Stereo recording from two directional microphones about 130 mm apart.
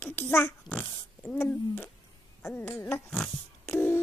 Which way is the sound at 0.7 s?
35° left (ahead or behind).